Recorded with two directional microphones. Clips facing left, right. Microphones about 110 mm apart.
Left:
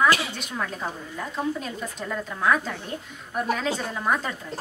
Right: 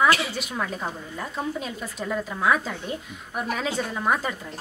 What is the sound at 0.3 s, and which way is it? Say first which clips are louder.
A woman's voice: right 2 dB; 5° right (ahead or behind).